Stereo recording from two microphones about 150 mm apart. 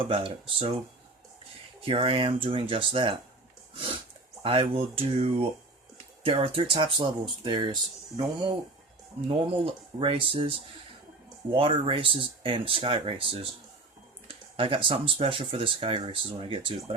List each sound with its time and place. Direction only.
0.0 s speech: 35° right (ahead or behind)
1.8 s speech: 35° right (ahead or behind)
3.8 s a sound: 35° right (ahead or behind)
4.4 s speech: 35° right (ahead or behind)
10.0 s speech: 35° right (ahead or behind)
11.5 s speech: 35° right (ahead or behind)